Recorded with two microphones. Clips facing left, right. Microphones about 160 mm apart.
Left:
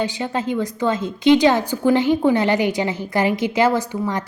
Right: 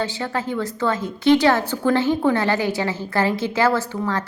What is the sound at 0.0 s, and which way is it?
A woman's voice, 15° left (ahead or behind).